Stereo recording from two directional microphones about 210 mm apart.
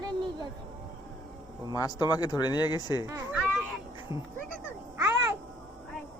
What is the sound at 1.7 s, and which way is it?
Speech, 15° left (ahead or behind).